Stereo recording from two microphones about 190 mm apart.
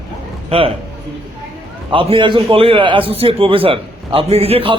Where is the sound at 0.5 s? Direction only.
30° right (ahead or behind).